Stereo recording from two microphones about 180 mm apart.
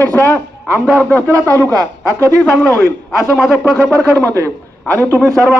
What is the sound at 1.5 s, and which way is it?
Speech, 20° right (ahead or behind).